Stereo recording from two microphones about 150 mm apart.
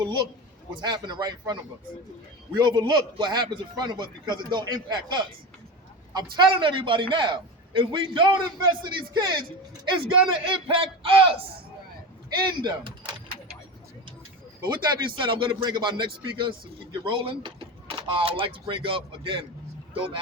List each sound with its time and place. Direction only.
0.0 s a man's voice: 30° right (ahead or behind)
2.6 s a man's voice: 30° right (ahead or behind)
6.3 s speech: 35° right (ahead or behind)
12.5 s speech: 30° right (ahead or behind)
14.6 s speech: 30° right (ahead or behind)